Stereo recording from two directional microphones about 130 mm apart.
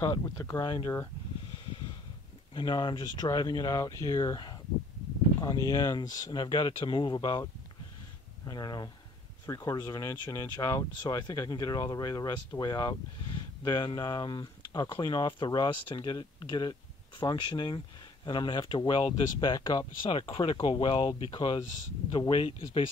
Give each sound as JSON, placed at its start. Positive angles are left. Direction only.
{"t": 0.0, "sound": "speech", "side_deg": 30}
{"t": 2.5, "sound": "speech", "side_deg": 35}
{"t": 8.5, "sound": "speech", "side_deg": 30}